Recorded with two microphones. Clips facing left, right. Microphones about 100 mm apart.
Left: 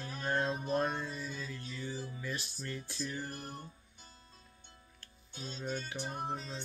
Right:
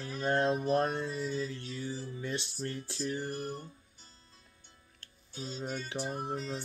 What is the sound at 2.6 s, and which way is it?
Mantra, 35° right (ahead or behind).